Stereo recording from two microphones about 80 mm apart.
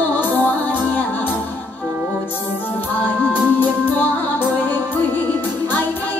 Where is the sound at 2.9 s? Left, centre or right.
Left.